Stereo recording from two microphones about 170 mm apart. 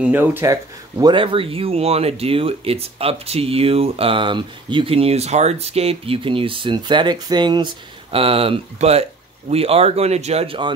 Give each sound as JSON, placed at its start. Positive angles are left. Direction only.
{"t": 0.0, "sound": "speech", "side_deg": -10}